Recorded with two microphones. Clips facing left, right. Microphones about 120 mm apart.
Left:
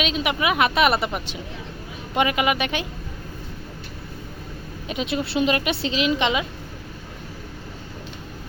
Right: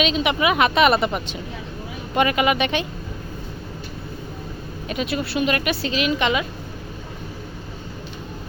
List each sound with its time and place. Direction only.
0.0 s a woman's voice: 5° left (ahead or behind)
4.9 s speech: 20° left (ahead or behind)